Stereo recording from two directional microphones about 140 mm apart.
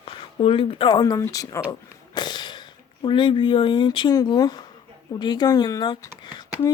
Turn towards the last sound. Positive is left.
turn(degrees=30)  # may be behind; listen again after turning